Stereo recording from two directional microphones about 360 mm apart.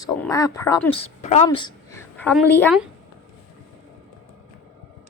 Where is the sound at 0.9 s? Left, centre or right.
Left.